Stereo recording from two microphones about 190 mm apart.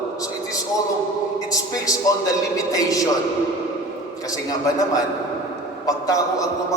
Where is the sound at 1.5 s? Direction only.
20° left (ahead or behind).